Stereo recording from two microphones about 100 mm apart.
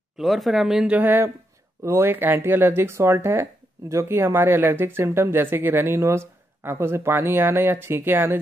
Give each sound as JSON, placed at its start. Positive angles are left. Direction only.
{"t": 0.2, "sound": "speech", "side_deg": 0}